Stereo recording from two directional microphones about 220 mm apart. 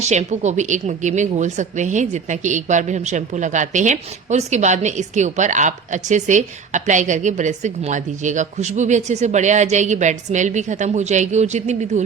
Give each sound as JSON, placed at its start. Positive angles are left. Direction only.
{"t": 0.1, "sound": "a woman's voice", "side_deg": -30}